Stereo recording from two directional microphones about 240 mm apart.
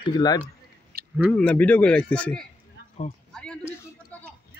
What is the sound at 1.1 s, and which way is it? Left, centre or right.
A man's voice, centre.